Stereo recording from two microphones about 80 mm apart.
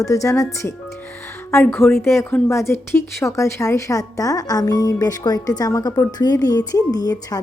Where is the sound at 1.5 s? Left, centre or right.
Left.